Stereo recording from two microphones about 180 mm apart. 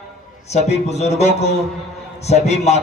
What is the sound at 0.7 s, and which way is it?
A man's voice, 35° left (ahead or behind).